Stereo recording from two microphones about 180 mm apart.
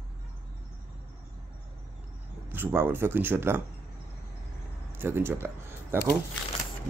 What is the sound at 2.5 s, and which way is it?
Speech, 10° right (ahead or behind).